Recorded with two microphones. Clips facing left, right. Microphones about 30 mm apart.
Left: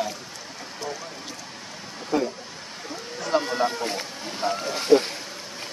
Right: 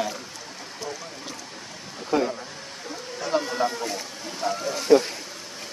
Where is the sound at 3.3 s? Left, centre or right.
Centre.